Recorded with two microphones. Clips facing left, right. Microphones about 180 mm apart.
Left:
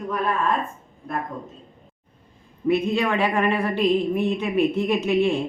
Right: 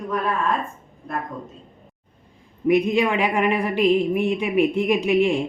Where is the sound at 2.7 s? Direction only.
15° right (ahead or behind).